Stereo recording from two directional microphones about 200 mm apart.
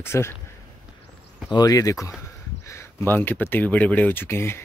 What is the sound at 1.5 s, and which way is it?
Speech, 20° left (ahead or behind).